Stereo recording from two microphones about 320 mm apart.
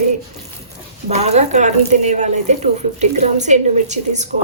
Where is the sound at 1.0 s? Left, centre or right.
Centre.